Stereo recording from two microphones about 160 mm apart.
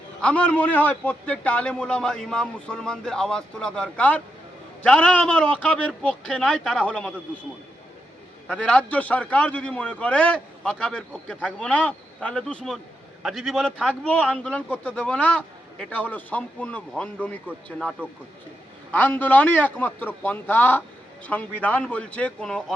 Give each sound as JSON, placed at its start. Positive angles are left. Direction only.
{"t": 0.2, "sound": "a man's voice", "side_deg": 5}
{"t": 8.4, "sound": "a man's voice", "side_deg": 5}